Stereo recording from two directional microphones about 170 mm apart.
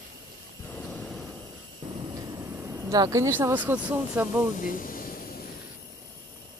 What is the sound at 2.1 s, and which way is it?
Speech, 20° right (ahead or behind).